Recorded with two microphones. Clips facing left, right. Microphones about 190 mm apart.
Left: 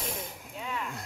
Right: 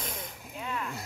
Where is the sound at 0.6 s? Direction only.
Centre (ahead or behind).